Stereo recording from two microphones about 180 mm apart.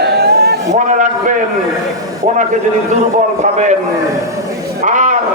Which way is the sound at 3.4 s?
40° right (ahead or behind).